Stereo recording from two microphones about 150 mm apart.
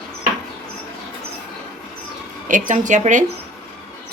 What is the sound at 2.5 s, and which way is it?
Speech, 55° right (ahead or behind).